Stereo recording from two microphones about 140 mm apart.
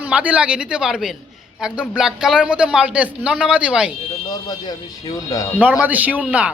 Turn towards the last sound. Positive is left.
turn(degrees=-10)  # may be behind; listen again after turning